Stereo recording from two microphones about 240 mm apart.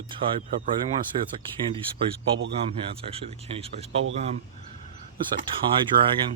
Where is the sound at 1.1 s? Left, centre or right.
Right.